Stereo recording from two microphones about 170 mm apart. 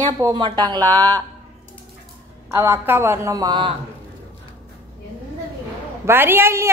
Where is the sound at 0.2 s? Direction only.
25° right (ahead or behind).